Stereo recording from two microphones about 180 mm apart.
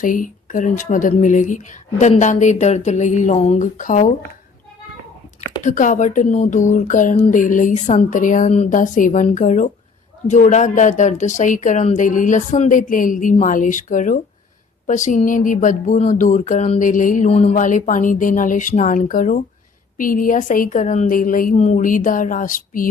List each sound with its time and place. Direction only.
0.0 s speech: 50° left (ahead or behind)
5.6 s speech: 45° left (ahead or behind)